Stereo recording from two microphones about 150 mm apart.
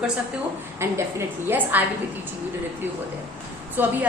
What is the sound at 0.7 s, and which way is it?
A woman's voice, 15° right (ahead or behind).